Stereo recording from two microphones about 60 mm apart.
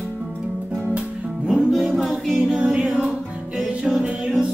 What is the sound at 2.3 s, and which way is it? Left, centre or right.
A capella, centre.